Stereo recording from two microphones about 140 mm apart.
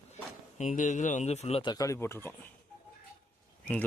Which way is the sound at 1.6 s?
25° left (ahead or behind).